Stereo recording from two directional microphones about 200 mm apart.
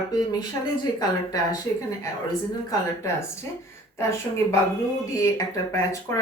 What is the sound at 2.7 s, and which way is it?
Speech, 15° left (ahead or behind).